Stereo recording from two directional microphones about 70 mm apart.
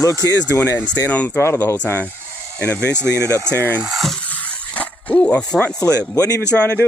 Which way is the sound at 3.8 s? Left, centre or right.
Centre.